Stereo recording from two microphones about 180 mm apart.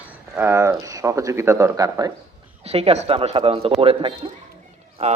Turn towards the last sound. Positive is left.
turn(degrees=-35)  # may be behind; listen again after turning